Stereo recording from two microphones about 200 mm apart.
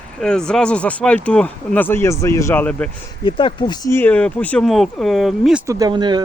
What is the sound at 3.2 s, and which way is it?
Speech, 25° left (ahead or behind).